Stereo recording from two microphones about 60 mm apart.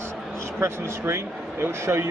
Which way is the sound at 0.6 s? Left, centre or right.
Right.